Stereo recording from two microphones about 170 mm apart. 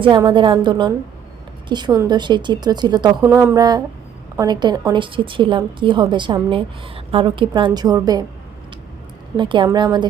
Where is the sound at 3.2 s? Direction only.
15° right (ahead or behind).